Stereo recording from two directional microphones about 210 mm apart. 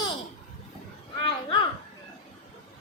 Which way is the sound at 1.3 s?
25° left (ahead or behind).